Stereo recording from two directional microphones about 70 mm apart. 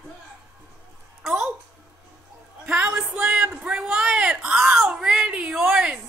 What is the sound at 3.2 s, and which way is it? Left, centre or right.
Music, centre.